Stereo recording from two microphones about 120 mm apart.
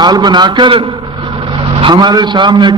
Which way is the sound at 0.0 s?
35° right (ahead or behind).